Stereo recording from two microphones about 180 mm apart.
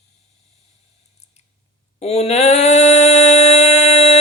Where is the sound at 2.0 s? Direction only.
35° left (ahead or behind).